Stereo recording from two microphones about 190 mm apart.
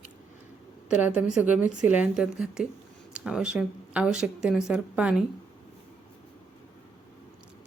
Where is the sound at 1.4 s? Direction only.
10° right (ahead or behind).